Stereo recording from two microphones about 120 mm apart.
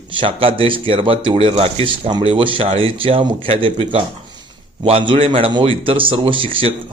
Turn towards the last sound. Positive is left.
turn(degrees=-45)  # may be behind; listen again after turning